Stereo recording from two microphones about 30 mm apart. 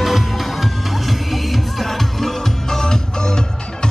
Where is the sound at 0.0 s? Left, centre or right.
Centre.